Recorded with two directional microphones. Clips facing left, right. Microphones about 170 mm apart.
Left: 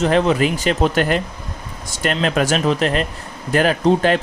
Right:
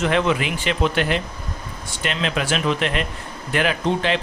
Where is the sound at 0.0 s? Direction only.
35° left (ahead or behind).